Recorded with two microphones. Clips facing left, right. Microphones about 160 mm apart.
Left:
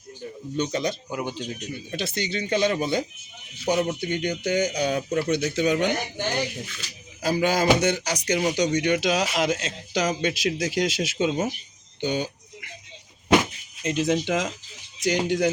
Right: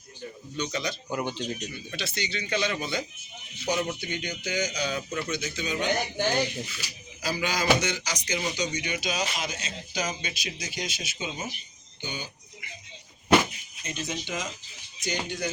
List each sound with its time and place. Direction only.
0.5 s speech: 50° left (ahead or behind)
1.1 s speech: 5° left (ahead or behind)
1.7 s speech: 50° left (ahead or behind)
5.0 s speech: 35° left (ahead or behind)
5.3 s speech: 65° left (ahead or behind)
6.1 s speech: centre (ahead or behind)
7.2 s speech: 50° left (ahead or behind)
11.9 s speech: 80° left
13.8 s speech: 90° left